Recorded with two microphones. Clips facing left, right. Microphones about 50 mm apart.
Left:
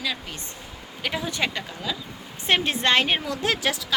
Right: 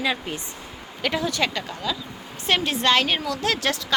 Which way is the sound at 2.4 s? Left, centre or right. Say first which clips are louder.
Right 1 dB; left.